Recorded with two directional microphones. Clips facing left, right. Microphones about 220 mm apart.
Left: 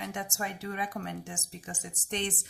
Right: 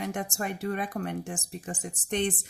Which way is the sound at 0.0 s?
50° right (ahead or behind).